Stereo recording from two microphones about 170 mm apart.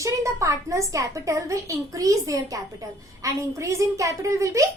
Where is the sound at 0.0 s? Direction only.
20° right (ahead or behind).